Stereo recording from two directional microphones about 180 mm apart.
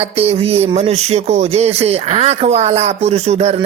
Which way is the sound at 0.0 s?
35° right (ahead or behind).